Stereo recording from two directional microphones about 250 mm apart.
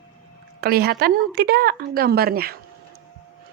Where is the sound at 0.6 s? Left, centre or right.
Right.